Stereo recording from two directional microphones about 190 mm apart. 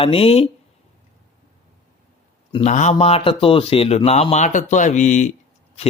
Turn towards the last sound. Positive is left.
turn(degrees=40)  # may be behind; listen again after turning